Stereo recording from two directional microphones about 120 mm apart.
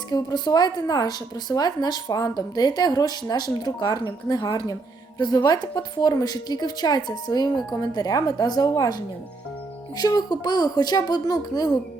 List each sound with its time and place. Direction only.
0.1 s a woman's voice: 35° left (ahead or behind)